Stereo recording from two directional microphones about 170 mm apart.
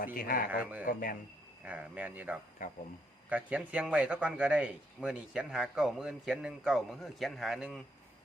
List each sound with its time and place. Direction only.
0.0 s a man's voice: 55° left (ahead or behind)
0.6 s speech: 10° right (ahead or behind)
0.9 s a man's voice: 55° left (ahead or behind)
1.6 s speech: 10° right (ahead or behind)
2.6 s speech: 50° left (ahead or behind)
3.2 s a man's voice: 10° right (ahead or behind)